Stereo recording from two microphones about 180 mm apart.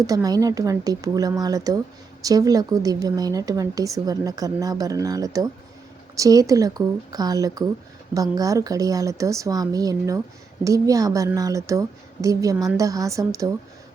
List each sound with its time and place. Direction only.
0.0 s speech: 20° right (ahead or behind)